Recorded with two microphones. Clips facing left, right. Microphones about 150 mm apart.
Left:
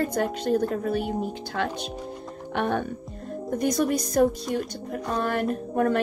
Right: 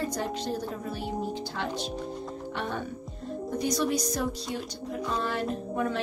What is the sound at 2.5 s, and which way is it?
Speech, 60° left (ahead or behind).